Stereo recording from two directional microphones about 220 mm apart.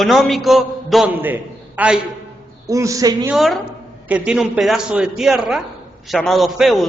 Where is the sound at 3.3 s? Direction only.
Centre (ahead or behind).